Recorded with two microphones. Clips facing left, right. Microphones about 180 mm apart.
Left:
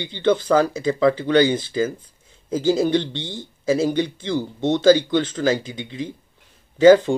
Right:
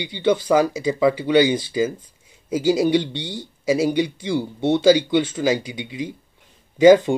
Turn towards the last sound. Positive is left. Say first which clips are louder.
# even
turn(degrees=-15)  # may be behind; listen again after turning